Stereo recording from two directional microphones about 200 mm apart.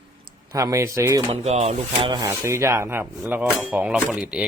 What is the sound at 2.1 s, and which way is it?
Speech, 15° right (ahead or behind).